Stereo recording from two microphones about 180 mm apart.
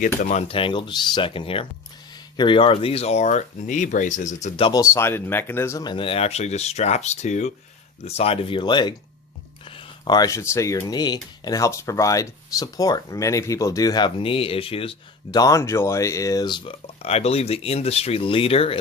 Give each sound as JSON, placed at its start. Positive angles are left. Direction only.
{"t": 0.2, "sound": "speech", "side_deg": 40}
{"t": 4.7, "sound": "speech", "side_deg": 15}